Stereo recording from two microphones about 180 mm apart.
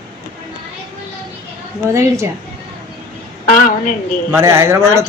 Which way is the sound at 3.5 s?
45° left (ahead or behind).